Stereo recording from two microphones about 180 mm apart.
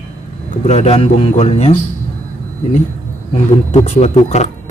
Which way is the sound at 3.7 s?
40° left (ahead or behind).